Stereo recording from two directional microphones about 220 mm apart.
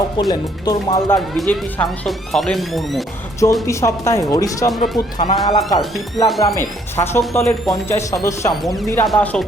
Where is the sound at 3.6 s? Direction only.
15° left (ahead or behind).